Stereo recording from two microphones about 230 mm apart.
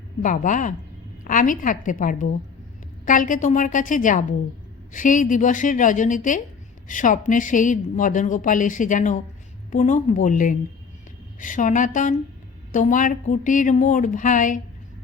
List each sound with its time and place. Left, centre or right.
0.2 s a woman's voice: left